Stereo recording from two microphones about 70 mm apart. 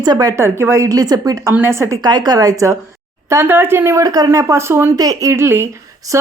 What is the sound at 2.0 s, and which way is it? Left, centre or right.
Speech, right.